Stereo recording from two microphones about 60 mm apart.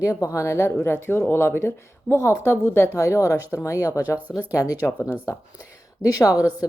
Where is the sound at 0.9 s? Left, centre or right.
Left.